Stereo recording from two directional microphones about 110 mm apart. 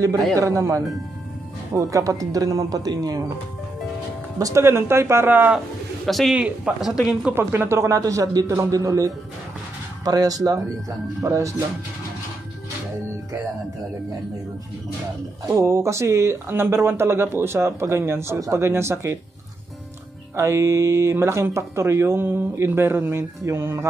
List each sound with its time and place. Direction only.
0.4 s speech: 25° right (ahead or behind)
4.4 s speech: 30° right (ahead or behind)
6.0 s a man's voice: centre (ahead or behind)
7.3 s speech: 20° right (ahead or behind)
15.4 s speech: 25° right (ahead or behind)
20.3 s speech: 25° right (ahead or behind)